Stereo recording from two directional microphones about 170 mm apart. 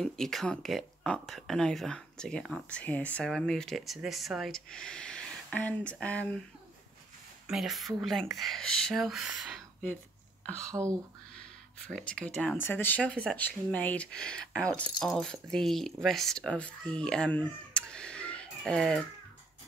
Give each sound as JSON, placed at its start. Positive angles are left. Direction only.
{"t": 0.0, "sound": "speech", "side_deg": 0}
{"t": 7.4, "sound": "speech", "side_deg": -5}
{"t": 10.7, "sound": "speech", "side_deg": -20}
{"t": 12.2, "sound": "speech", "side_deg": 5}